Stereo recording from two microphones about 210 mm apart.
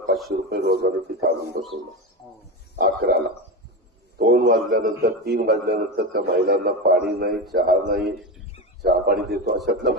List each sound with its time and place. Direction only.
0.5 s a man's voice: 50° right (ahead or behind)
2.2 s a sound: 10° left (ahead or behind)
2.7 s a man's voice: 50° right (ahead or behind)